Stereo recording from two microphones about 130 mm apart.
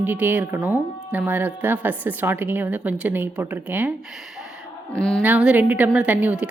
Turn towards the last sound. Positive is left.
turn(degrees=-10)  # may be behind; listen again after turning